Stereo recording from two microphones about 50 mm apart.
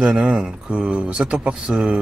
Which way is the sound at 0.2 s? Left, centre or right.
Right.